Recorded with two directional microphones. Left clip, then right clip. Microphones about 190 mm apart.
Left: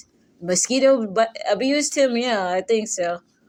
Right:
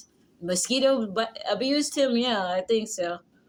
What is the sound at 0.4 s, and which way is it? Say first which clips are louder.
A woman's voice: left 6 dB; 30° left (ahead or behind).